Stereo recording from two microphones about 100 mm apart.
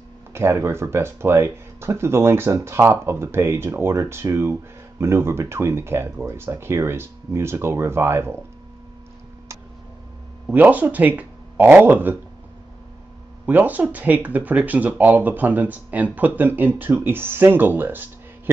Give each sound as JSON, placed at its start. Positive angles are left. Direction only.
{"t": 0.3, "sound": "speech", "side_deg": -25}
{"t": 10.5, "sound": "speech", "side_deg": -15}
{"t": 13.5, "sound": "speech", "side_deg": -20}